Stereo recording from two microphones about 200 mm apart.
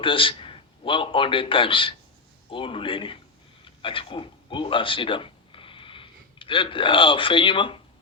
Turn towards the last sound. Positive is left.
turn(degrees=25)  # may be behind; listen again after turning